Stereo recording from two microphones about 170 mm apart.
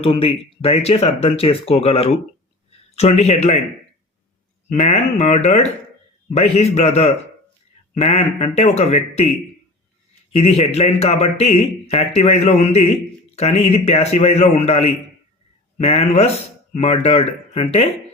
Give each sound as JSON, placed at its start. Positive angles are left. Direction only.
{"t": 0.0, "sound": "speech", "side_deg": 35}
{"t": 4.7, "sound": "speech", "side_deg": 45}
{"t": 10.3, "sound": "speech", "side_deg": 40}